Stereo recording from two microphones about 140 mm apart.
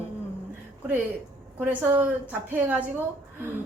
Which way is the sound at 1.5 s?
15° right (ahead or behind).